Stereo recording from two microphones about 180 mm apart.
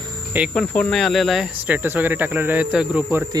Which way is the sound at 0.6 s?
5° left (ahead or behind).